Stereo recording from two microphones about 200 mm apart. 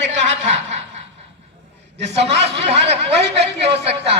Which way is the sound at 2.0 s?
30° right (ahead or behind).